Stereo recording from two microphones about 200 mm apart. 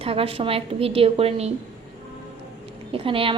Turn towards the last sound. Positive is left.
turn(degrees=-25)  # may be behind; listen again after turning